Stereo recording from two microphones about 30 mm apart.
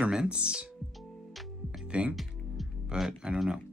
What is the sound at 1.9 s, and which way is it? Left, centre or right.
Speech, right.